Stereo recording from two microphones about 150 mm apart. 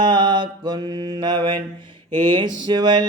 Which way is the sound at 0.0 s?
30° right (ahead or behind).